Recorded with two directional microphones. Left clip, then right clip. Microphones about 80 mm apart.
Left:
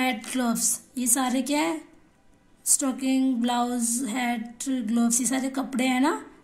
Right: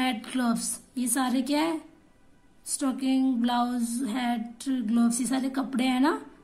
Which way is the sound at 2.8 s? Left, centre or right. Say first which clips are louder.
Right 1 dB; left.